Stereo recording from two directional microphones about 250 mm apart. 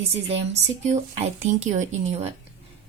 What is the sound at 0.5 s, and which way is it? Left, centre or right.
A woman's voice, right.